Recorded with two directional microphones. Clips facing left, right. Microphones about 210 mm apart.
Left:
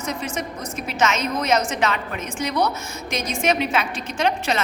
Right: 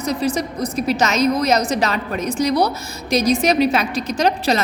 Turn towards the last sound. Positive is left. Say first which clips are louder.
# right 4 dB
turn(degrees=-35)  # may be behind; listen again after turning